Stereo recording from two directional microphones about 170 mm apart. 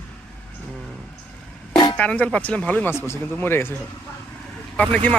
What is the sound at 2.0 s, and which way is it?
Speech, 10° left (ahead or behind).